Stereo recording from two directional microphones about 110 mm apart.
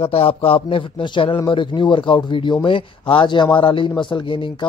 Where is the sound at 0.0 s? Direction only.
60° left (ahead or behind).